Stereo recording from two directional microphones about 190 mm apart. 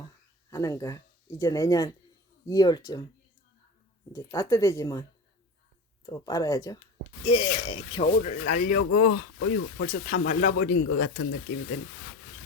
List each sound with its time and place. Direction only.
0.5 s speech: 15° left (ahead or behind)
4.1 s speech: 15° left (ahead or behind)
6.1 s speech: 20° left (ahead or behind)
8.0 s speech: 40° left (ahead or behind); by 9.8 s 85° left
9.8 s speech: 40° left (ahead or behind); by 11.5 s 55° left (ahead or behind)